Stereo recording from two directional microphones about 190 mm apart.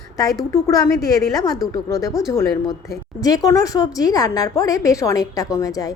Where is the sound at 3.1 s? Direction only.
20° left (ahead or behind).